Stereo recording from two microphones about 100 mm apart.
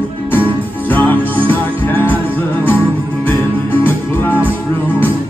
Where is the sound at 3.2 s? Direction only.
20° left (ahead or behind).